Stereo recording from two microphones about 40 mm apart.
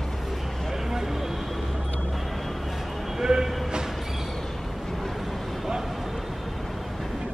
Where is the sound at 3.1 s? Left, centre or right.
Centre.